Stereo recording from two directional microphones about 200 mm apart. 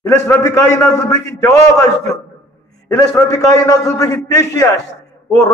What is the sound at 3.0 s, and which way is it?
A man's voice, 15° left (ahead or behind).